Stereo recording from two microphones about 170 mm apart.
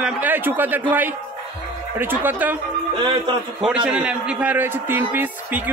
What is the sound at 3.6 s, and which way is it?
A man's voice, 5° right (ahead or behind).